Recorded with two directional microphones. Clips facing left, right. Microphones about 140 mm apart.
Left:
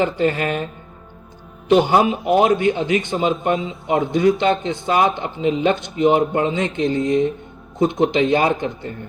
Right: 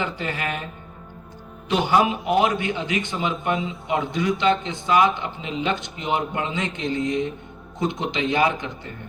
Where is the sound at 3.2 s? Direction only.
25° left (ahead or behind).